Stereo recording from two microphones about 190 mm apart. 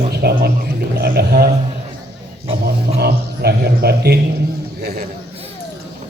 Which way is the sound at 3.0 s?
55° right (ahead or behind).